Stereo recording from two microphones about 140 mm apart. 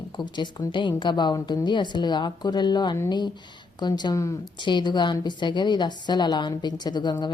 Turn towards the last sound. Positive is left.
turn(degrees=30)  # may be behind; listen again after turning